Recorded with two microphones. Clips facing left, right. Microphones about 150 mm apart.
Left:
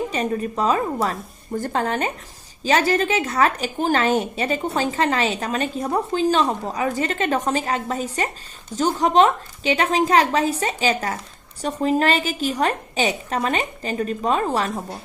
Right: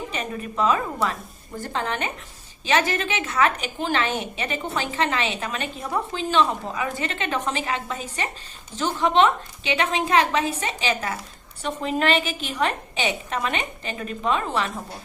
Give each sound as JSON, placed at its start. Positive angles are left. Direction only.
{"t": 0.1, "sound": "a woman's voice", "side_deg": 40}